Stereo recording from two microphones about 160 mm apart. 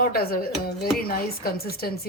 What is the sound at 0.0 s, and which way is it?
Speech, 70° left (ahead or behind).